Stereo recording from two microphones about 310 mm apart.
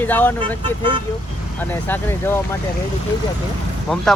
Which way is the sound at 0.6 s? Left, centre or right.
Centre.